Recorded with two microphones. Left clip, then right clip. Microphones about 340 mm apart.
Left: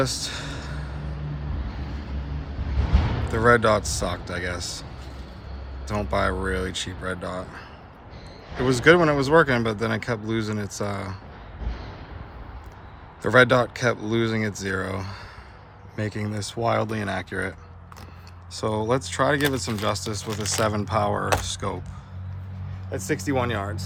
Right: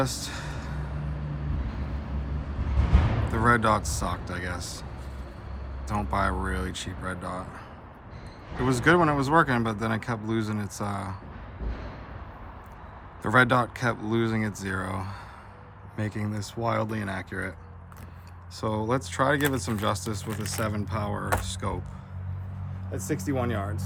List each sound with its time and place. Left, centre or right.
0.0 s a sound: centre
3.3 s speech: centre
5.9 s speech: centre
8.6 s speech: centre
13.2 s speech: centre
18.6 s speech: centre
22.9 s speech: left